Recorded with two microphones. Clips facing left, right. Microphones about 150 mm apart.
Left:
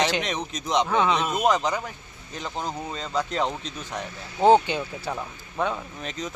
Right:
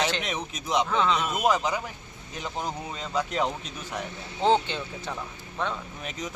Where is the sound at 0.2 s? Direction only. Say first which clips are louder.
Left 3 dB; 5° right (ahead or behind).